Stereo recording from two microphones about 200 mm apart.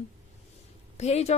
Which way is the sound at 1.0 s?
35° left (ahead or behind).